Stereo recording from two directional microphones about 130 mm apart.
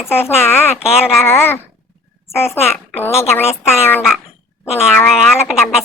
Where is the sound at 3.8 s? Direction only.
20° left (ahead or behind).